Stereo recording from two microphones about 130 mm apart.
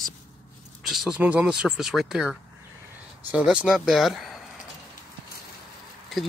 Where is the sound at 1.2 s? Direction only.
10° right (ahead or behind).